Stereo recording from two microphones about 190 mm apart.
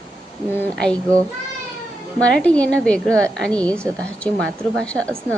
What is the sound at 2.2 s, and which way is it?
A woman's voice, 5° left (ahead or behind).